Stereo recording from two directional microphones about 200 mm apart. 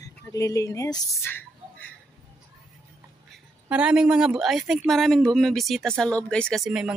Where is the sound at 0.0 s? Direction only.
15° left (ahead or behind).